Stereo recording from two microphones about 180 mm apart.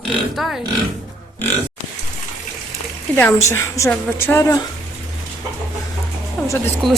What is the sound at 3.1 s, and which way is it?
A woman's voice, 15° left (ahead or behind).